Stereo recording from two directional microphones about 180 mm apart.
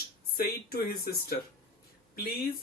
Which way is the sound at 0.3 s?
55° left (ahead or behind).